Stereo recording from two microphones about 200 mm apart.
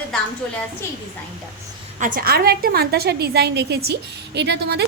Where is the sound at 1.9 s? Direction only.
40° right (ahead or behind).